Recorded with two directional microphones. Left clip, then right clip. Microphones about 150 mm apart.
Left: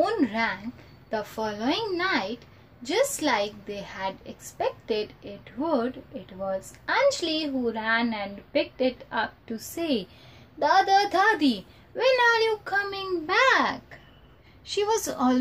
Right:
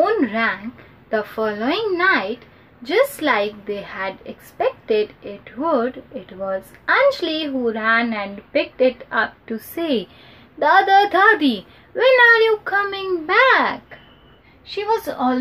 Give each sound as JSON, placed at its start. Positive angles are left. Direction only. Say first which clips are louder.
{"t": 0.0, "sound": "a sound", "louder": "right 7 dB", "side_deg": 0}
{"t": 1.1, "sound": "a woman's voice", "louder": "right 8 dB", "side_deg": 0}
{"t": 14.7, "sound": "a woman's voice", "louder": "right 4 dB", "side_deg": 35}